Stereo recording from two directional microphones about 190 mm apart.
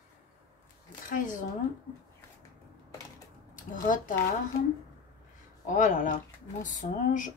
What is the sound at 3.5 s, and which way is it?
Speech, 45° left (ahead or behind).